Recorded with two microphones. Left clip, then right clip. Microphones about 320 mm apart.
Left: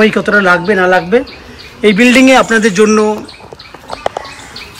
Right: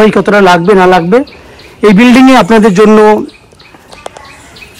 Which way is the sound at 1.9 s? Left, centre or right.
Centre.